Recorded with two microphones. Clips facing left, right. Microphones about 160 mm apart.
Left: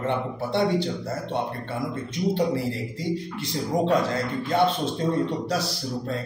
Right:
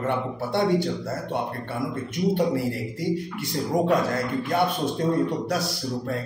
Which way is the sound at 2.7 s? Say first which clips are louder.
Right 2 dB; 25° left (ahead or behind).